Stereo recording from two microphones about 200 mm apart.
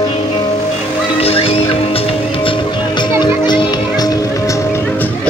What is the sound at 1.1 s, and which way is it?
Music, 30° left (ahead or behind).